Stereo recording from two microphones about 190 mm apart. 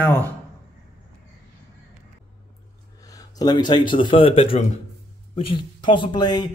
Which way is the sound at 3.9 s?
25° left (ahead or behind).